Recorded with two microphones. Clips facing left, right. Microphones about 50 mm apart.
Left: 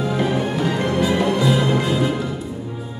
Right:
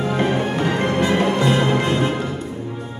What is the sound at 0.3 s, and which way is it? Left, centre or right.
Music, right.